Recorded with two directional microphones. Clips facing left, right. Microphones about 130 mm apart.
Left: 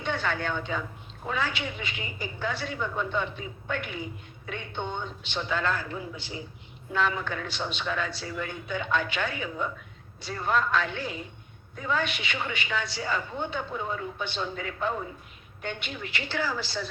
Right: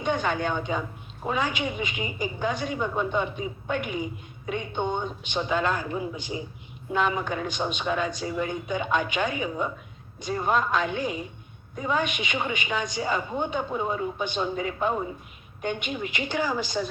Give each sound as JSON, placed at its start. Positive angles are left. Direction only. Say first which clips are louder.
{"t": 0.0, "sound": "a woman's voice", "louder": "right 4 dB", "side_deg": -15}